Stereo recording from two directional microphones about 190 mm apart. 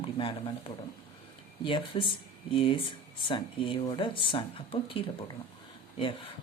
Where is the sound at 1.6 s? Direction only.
25° left (ahead or behind).